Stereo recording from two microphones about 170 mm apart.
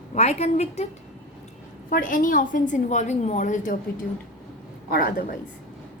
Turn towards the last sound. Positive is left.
turn(degrees=60)  # may be behind; listen again after turning